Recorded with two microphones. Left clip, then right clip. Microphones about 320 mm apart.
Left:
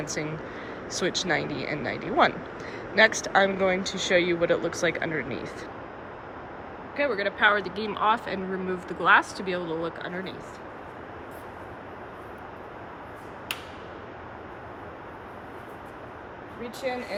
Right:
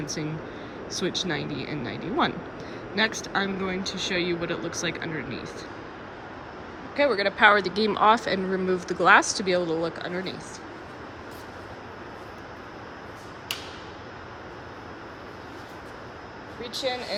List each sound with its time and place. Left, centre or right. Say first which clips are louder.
0.0 s speech: left 1 dB; centre
6.9 s speech: right 4 dB; centre
16.9 s speech: right 1 dB; centre